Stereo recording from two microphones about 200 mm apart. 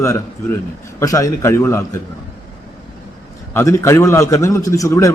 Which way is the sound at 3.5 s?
15° left (ahead or behind).